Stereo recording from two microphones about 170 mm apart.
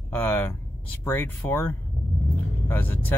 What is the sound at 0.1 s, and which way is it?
Speech, 10° left (ahead or behind).